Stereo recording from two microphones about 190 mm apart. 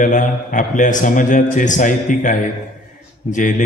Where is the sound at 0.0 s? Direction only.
40° left (ahead or behind).